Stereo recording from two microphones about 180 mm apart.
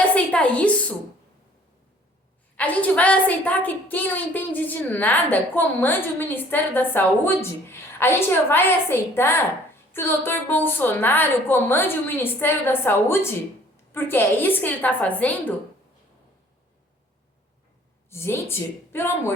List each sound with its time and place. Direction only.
0.1 s a sound: 5° left (ahead or behind)
2.6 s a woman's voice: 10° left (ahead or behind)
18.1 s a woman's voice: 15° left (ahead or behind)